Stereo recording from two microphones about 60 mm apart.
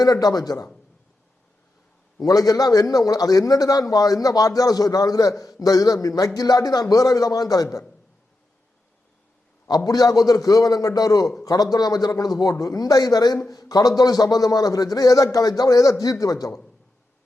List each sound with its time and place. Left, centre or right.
0.0 s a man's voice: left
2.1 s a man's voice: left
9.7 s a man's voice: left